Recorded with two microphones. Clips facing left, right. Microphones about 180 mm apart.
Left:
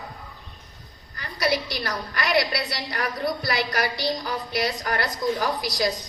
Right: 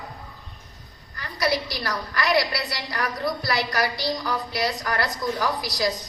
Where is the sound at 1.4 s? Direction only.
25° left (ahead or behind).